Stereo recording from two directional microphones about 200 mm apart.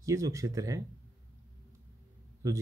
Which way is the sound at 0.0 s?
15° right (ahead or behind).